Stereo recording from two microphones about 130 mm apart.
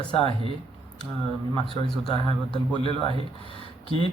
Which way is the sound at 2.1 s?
40° left (ahead or behind).